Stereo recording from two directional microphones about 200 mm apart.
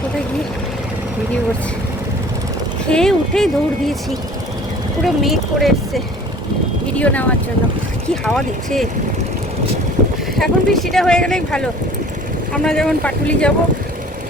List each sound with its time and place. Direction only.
2.9 s speech: 5° left (ahead or behind)
5.0 s speech: centre (ahead or behind)
7.0 s speech: 5° left (ahead or behind)
10.0 s vehicle: 40° right (ahead or behind)
10.3 s speech: centre (ahead or behind)